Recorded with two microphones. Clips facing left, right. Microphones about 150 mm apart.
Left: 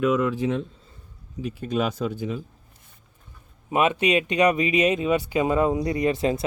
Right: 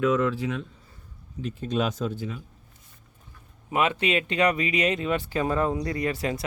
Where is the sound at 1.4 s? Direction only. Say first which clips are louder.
Left 2 dB; 10° left (ahead or behind).